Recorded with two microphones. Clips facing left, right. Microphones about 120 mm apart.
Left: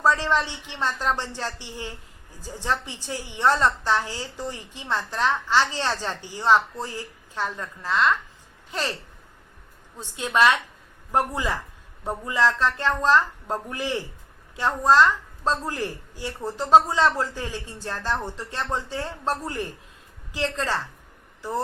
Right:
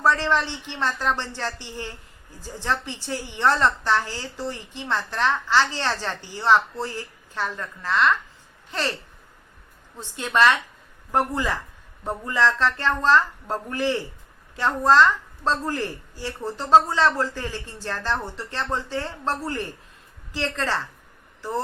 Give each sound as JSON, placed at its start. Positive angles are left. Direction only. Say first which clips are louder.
{"t": 0.0, "sound": "a woman's voice", "louder": "right 1 dB", "side_deg": 15}
{"t": 10.0, "sound": "a woman's voice", "louder": "right 1 dB", "side_deg": 15}